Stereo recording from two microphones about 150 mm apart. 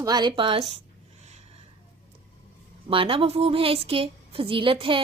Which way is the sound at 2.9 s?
35° right (ahead or behind).